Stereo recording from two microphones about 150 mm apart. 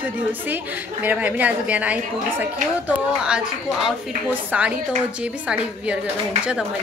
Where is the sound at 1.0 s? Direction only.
10° right (ahead or behind).